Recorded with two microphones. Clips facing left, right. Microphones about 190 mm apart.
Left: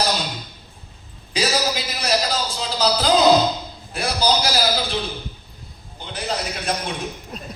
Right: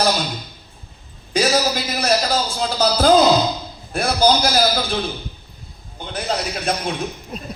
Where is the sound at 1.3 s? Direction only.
50° right (ahead or behind).